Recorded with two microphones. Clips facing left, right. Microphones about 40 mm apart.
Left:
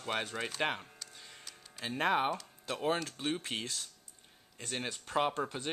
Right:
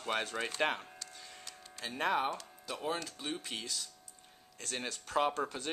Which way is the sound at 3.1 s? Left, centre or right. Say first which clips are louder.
Left 4 dB; left.